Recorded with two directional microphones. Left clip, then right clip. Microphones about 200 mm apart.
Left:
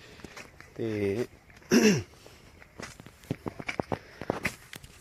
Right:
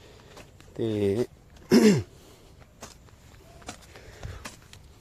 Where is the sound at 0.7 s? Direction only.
20° right (ahead or behind).